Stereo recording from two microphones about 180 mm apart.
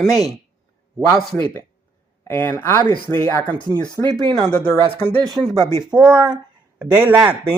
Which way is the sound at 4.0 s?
25° right (ahead or behind).